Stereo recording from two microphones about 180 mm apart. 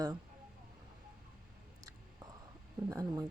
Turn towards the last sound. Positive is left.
turn(degrees=-20)  # may be behind; listen again after turning